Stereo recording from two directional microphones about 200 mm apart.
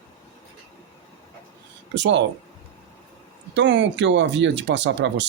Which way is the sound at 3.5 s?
65° right (ahead or behind).